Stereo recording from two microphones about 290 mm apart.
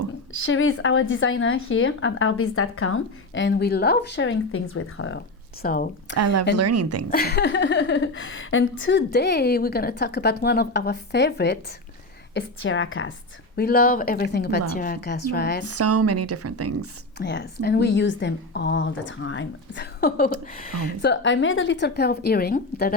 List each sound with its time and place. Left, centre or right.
0.3 s speech: left
5.6 s speech: left
6.1 s a woman's voice: right
7.1 s a woman's voice: left
13.6 s a woman's voice: left
15.6 s a woman's voice: right
17.2 s a woman's voice: left